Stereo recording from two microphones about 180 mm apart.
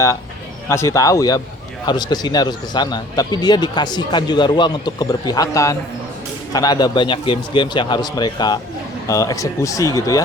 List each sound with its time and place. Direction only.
0.7 s a man's voice: 15° left (ahead or behind)